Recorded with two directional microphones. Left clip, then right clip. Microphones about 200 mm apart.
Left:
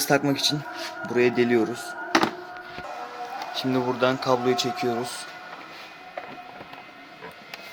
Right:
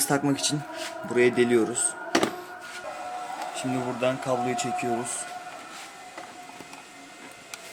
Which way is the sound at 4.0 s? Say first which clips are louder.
Left 3 dB; 20° left (ahead or behind).